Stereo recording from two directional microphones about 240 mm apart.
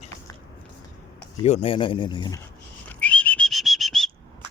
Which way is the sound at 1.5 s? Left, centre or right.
Left.